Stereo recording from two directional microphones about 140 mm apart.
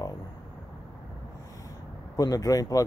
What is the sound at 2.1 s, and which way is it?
Speech, 25° left (ahead or behind).